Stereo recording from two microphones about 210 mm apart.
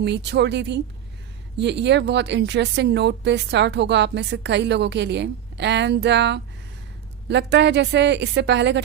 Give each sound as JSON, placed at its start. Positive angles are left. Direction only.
{"t": 0.0, "sound": "a woman's voice", "side_deg": -55}